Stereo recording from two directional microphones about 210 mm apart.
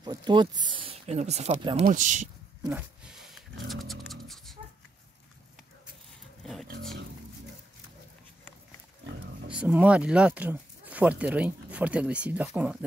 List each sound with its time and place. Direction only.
0.0 s speech: 20° right (ahead or behind)
1.9 s speech: 35° right (ahead or behind)
2.6 s music: 5° right (ahead or behind)
6.4 s dog: centre (ahead or behind)
9.5 s speech: 5° right (ahead or behind)